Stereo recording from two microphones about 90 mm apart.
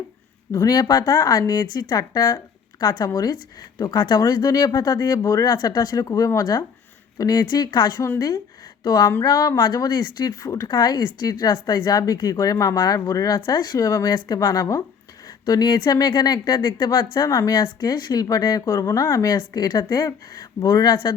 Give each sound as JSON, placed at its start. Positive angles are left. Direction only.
{"t": 0.5, "sound": "speech", "side_deg": 40}
{"t": 5.5, "sound": "speech", "side_deg": 50}
{"t": 6.1, "sound": "speech", "side_deg": 40}
{"t": 13.4, "sound": "speech", "side_deg": 55}
{"t": 17.6, "sound": "speech", "side_deg": 50}
{"t": 20.9, "sound": "speech", "side_deg": 60}